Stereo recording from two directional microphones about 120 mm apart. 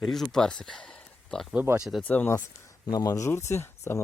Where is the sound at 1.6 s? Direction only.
10° right (ahead or behind).